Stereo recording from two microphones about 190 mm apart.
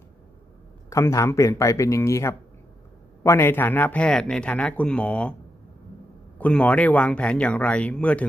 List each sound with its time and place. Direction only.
0.9 s speech: 15° left (ahead or behind)
6.4 s speech: 10° left (ahead or behind)